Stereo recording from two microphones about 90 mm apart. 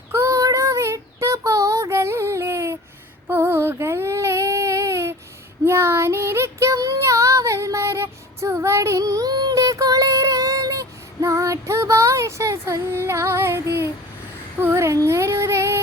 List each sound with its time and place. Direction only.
0.1 s child singing: 35° right (ahead or behind)
3.2 s a sound: 25° right (ahead or behind)
5.6 s child singing: 30° right (ahead or behind)